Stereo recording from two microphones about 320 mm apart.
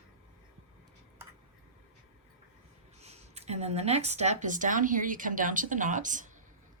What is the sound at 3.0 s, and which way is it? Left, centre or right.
A woman's voice, centre.